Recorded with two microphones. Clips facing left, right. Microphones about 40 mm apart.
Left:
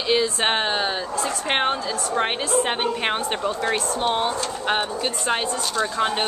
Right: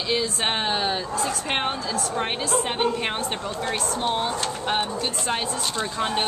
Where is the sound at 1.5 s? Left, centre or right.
Centre.